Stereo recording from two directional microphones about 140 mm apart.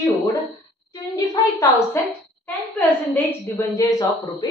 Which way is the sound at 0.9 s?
25° left (ahead or behind).